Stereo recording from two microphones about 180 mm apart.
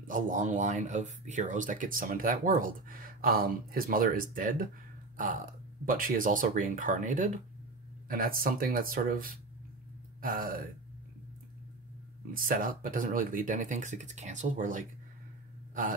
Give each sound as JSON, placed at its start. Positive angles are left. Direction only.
{"t": 0.0, "sound": "speech", "side_deg": -45}
{"t": 12.3, "sound": "speech", "side_deg": -50}